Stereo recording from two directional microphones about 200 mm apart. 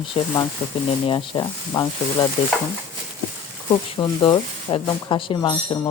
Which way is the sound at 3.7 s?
25° left (ahead or behind).